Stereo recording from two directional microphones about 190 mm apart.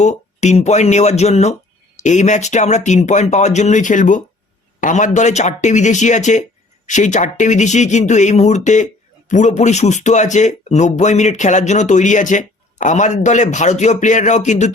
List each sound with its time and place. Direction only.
0.0 s speech: 40° left (ahead or behind)